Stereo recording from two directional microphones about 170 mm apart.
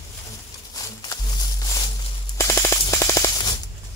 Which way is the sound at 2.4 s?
15° left (ahead or behind).